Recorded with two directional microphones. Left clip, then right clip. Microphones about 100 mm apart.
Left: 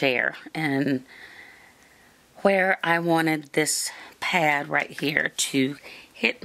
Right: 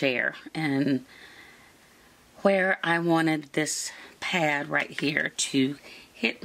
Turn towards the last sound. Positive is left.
turn(degrees=30)  # may be behind; listen again after turning